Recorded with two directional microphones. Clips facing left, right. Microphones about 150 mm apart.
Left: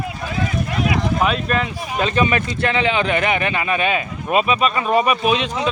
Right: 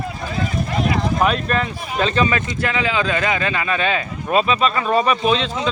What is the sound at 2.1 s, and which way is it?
Speech, 20° left (ahead or behind).